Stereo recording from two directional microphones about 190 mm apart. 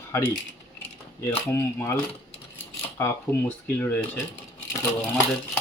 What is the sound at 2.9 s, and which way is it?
Coin, 15° left (ahead or behind).